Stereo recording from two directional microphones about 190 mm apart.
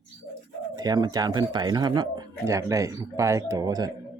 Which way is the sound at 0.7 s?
20° right (ahead or behind).